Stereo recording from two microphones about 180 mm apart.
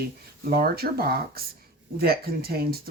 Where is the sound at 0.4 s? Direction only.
55° right (ahead or behind).